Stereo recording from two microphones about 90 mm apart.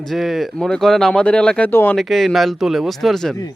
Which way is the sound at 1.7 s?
25° left (ahead or behind).